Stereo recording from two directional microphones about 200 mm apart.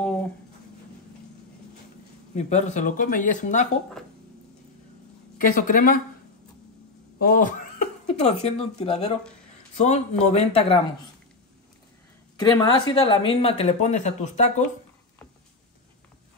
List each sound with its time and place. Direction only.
0.0 s a sound: 5° left (ahead or behind)
2.3 s speech: 35° left (ahead or behind)
5.4 s speech: 40° left (ahead or behind)
7.2 s speech: 45° left (ahead or behind)
12.4 s speech: 20° left (ahead or behind)